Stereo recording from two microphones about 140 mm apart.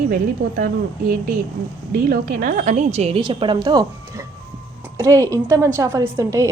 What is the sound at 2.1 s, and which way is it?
A woman's voice, 75° right (ahead or behind).